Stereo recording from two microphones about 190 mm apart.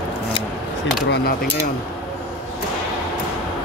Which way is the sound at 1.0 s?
60° left (ahead or behind).